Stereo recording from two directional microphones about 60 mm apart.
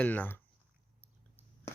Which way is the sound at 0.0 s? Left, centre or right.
Left.